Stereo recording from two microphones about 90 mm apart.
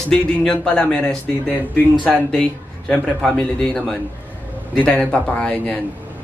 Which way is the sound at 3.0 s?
5° left (ahead or behind).